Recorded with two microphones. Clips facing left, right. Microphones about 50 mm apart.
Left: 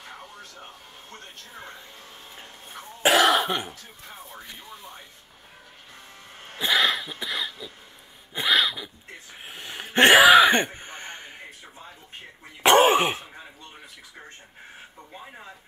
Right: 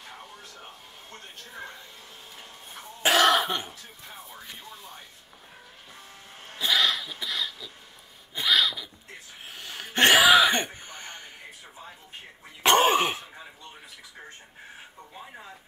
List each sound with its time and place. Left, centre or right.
3.0 s cough: centre
6.6 s throat clearing: left
8.4 s a sound: left
9.5 s sneeze: left
12.6 s throat clearing: centre